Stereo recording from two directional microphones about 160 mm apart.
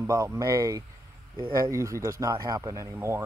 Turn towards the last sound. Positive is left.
turn(degrees=-15)  # may be behind; listen again after turning